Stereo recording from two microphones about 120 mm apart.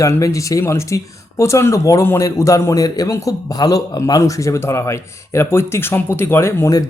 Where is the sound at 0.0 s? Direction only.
25° left (ahead or behind).